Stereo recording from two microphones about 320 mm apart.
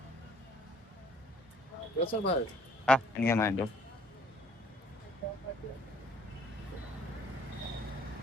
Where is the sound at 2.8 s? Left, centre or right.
Centre.